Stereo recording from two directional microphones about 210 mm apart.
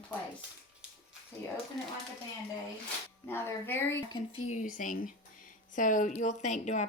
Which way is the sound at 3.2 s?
10° left (ahead or behind).